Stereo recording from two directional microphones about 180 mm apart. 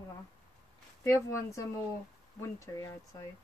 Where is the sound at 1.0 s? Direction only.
15° left (ahead or behind).